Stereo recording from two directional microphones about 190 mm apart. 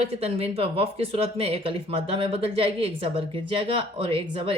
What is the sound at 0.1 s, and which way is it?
Speech, 30° right (ahead or behind).